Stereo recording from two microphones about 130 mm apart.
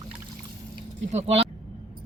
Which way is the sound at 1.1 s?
55° right (ahead or behind).